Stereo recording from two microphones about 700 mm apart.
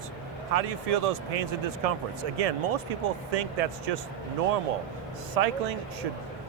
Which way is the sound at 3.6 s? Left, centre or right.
Right.